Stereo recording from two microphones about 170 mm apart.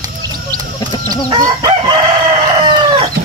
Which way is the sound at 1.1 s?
25° right (ahead or behind).